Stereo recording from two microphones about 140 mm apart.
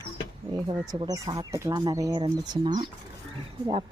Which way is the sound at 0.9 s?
25° right (ahead or behind).